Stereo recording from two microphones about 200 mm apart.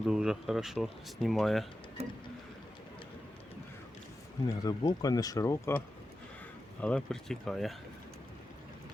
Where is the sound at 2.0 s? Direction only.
30° right (ahead or behind).